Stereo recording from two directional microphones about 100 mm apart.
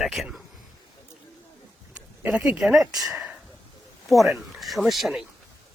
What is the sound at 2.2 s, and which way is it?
Speech, 10° right (ahead or behind).